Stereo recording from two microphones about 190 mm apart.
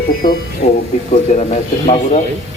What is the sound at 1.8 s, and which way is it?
Speech, 35° left (ahead or behind).